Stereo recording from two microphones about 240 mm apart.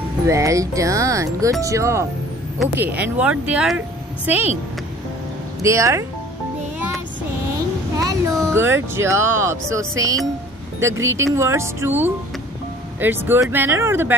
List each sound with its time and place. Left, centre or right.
0.3 s speech: centre
5.6 s speech: centre
8.0 s a sound: centre
8.5 s speech: centre